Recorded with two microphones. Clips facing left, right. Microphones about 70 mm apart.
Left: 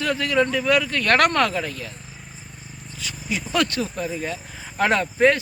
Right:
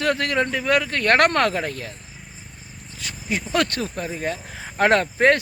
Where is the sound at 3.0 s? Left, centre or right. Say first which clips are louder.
Right 1 dB; right.